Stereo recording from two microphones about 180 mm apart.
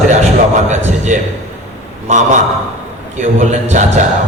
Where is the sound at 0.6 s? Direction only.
40° right (ahead or behind).